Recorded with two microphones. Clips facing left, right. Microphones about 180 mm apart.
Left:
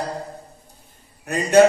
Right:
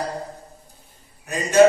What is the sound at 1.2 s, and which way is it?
Speech, 60° left (ahead or behind).